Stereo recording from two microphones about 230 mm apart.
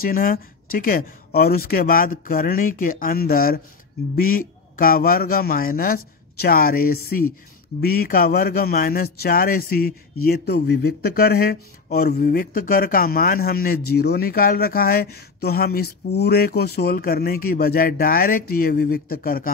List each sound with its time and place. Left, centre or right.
0.0 s speech: left